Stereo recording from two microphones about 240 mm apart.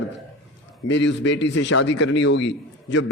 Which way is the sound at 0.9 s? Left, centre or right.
Left.